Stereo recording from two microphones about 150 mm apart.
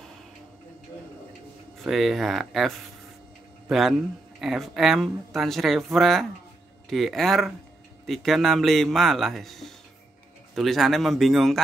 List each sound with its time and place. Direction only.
1.8 s speech: centre (ahead or behind)